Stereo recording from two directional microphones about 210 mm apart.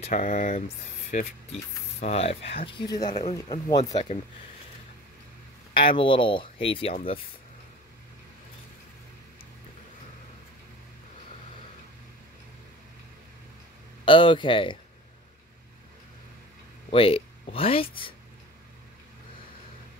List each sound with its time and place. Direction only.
0.0 s speech: 40° left (ahead or behind)
2.0 s speech: 30° left (ahead or behind)
3.1 s speech: 35° left (ahead or behind)
3.4 s speech: 20° left (ahead or behind)
5.9 s speech: 25° left (ahead or behind)
14.0 s speech: 25° left (ahead or behind)
16.9 s speech: 25° left (ahead or behind)